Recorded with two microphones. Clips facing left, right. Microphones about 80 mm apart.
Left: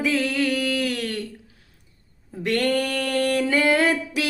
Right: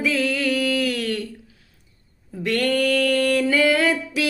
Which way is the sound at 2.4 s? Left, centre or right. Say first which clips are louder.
Right 2 dB; left.